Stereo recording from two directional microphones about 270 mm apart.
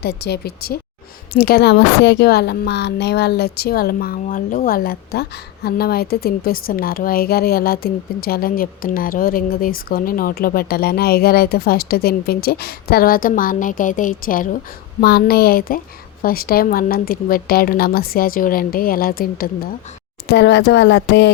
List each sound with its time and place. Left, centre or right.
0.0 s a woman's voice: left